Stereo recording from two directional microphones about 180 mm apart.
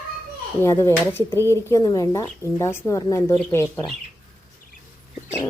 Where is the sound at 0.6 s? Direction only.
15° left (ahead or behind).